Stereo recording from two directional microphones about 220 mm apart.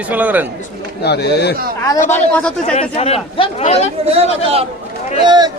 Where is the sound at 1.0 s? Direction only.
50° left (ahead or behind).